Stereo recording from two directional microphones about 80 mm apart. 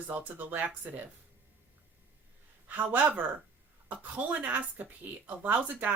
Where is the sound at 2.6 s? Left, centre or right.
Right.